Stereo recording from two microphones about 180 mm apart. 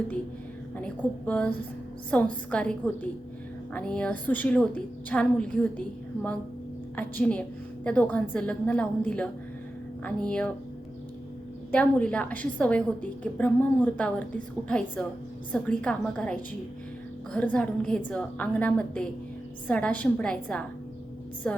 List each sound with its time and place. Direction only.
0.8 s a woman's voice: 5° left (ahead or behind)
6.9 s a woman's voice: 10° left (ahead or behind)
11.7 s a woman's voice: 5° left (ahead or behind)